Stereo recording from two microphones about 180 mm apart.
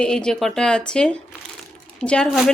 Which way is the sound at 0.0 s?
5° left (ahead or behind).